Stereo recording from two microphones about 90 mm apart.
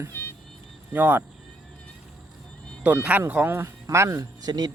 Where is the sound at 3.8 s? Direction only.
35° right (ahead or behind).